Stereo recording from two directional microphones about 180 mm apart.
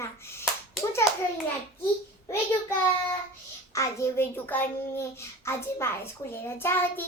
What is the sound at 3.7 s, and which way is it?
A child's voice, 15° left (ahead or behind).